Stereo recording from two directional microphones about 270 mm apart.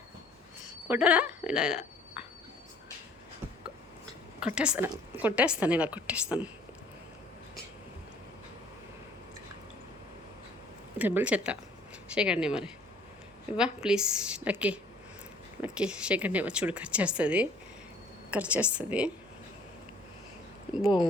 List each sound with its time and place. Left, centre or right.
0.9 s speech: centre
4.4 s a woman's voice: centre
10.9 s speech: centre
20.7 s speech: centre